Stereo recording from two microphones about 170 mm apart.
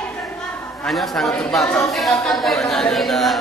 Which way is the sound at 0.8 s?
Centre (ahead or behind).